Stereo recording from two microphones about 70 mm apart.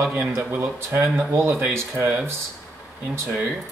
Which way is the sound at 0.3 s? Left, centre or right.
Right.